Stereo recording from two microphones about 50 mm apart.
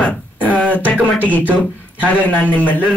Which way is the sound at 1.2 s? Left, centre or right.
Left.